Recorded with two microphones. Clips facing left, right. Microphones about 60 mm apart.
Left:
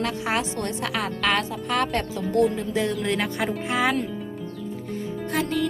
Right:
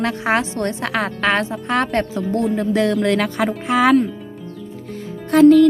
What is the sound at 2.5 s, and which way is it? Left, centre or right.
Speech, right.